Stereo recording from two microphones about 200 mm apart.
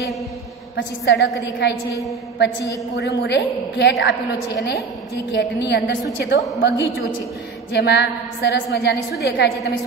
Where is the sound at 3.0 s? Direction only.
55° left (ahead or behind).